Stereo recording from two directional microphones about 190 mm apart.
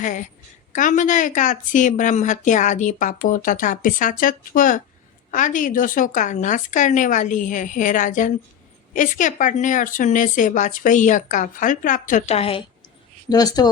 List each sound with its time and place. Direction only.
0.0 s a woman's voice: 40° left (ahead or behind); by 13.7 s 20° left (ahead or behind)